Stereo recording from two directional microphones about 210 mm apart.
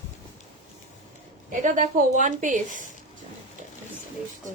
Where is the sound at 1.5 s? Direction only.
35° right (ahead or behind).